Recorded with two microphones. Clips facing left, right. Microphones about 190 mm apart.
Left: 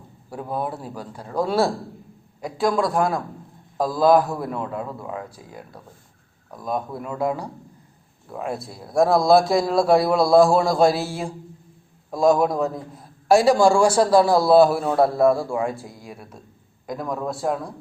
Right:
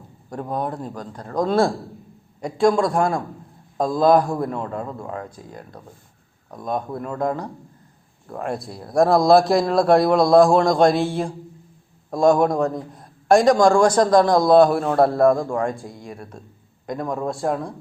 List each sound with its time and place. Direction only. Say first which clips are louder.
0.5 s a man's voice: right 1 dB; 5° left (ahead or behind)